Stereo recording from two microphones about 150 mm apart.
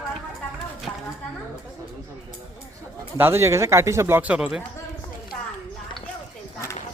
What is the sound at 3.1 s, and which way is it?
A man's voice, 15° right (ahead or behind).